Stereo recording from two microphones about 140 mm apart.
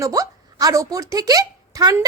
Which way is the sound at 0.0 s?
25° right (ahead or behind).